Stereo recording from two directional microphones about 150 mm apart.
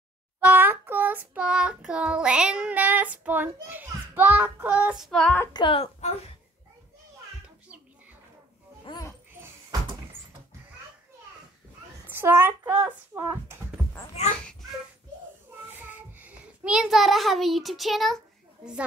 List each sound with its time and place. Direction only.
0.4 s child singing: 15° right (ahead or behind)
3.3 s a child's voice: 15° right (ahead or behind); by 5.4 s 5° left (ahead or behind)
5.5 s a woman's voice: 35° left (ahead or behind)
8.8 s a sound: 25° left (ahead or behind)
12.1 s a child's voice: 15° right (ahead or behind)
14.2 s a child's voice: 45° left (ahead or behind)
15.9 s a child's voice: 10° right (ahead or behind)